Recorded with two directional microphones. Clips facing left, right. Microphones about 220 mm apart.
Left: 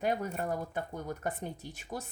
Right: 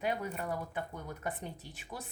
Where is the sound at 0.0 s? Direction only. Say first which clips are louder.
Left 3 dB; 45° left (ahead or behind).